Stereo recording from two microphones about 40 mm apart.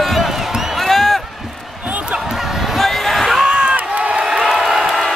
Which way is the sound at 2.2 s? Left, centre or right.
Centre.